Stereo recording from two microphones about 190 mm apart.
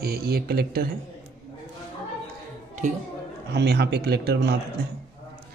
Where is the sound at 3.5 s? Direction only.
60° right (ahead or behind).